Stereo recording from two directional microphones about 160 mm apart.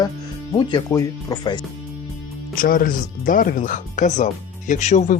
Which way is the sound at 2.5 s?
60° left (ahead or behind).